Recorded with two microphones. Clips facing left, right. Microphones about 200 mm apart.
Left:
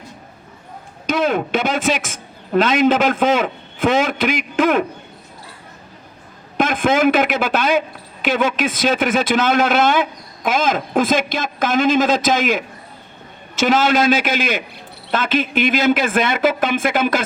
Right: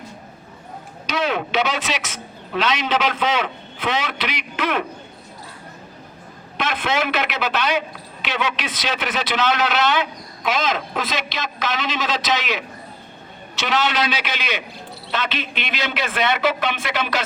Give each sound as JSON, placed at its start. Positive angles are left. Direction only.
{"t": 1.0, "sound": "speech", "side_deg": 50}
{"t": 6.6, "sound": "speech", "side_deg": 50}